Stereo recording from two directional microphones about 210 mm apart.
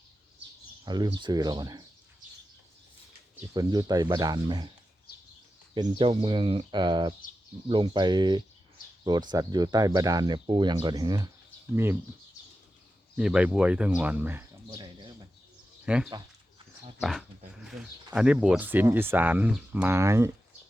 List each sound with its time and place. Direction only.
0.9 s speech: 20° right (ahead or behind)
3.5 s speech: 20° right (ahead or behind)
6.0 s speech: 25° right (ahead or behind)
13.1 s speech: 5° right (ahead or behind)
15.9 s dog: 5° right (ahead or behind)
18.1 s speech: 5° right (ahead or behind)